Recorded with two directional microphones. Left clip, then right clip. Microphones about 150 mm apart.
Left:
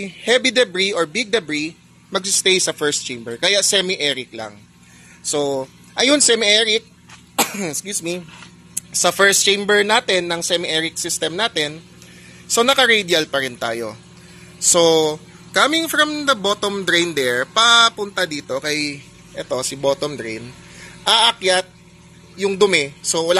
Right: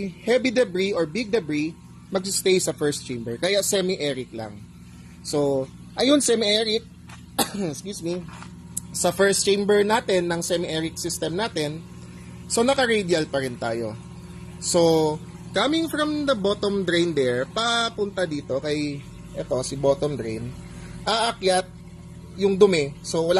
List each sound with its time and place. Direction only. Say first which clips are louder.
0.0 s speech: left 5 dB; 5° left (ahead or behind)
7.5 s speech: left 5 dB; 25° left (ahead or behind)
9.2 s speech: left 5 dB; 5° left (ahead or behind)